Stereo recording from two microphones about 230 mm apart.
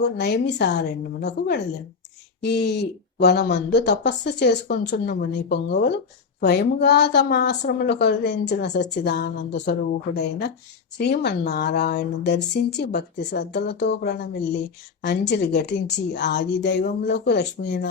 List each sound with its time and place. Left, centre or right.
0.0 s speech: left
10.9 s speech: left